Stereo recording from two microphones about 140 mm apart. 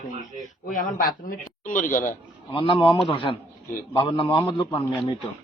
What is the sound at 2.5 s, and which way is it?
A man's voice, 40° left (ahead or behind).